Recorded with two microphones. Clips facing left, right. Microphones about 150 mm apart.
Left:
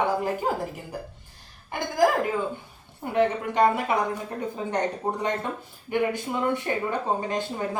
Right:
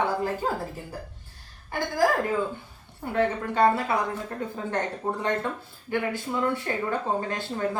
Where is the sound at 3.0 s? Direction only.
15° left (ahead or behind).